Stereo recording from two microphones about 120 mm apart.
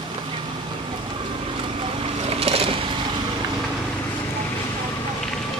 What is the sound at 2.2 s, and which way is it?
Vehicle, 55° right (ahead or behind).